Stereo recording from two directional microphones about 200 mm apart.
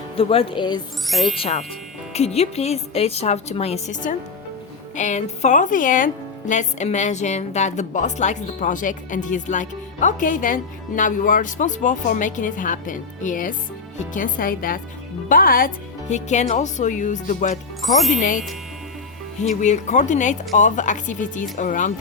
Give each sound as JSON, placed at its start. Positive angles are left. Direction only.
{"t": 0.2, "sound": "speech", "side_deg": 30}
{"t": 1.0, "sound": "speech", "side_deg": 0}
{"t": 1.4, "sound": "a woman's voice", "side_deg": 30}
{"t": 19.6, "sound": "a woman's voice", "side_deg": 35}